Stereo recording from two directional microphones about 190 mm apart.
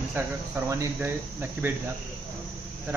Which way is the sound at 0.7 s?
15° right (ahead or behind).